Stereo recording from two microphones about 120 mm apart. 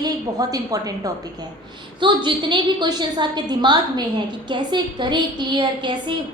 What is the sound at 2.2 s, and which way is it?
A woman's voice, 40° right (ahead or behind).